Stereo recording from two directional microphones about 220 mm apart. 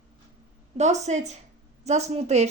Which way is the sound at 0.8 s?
30° right (ahead or behind).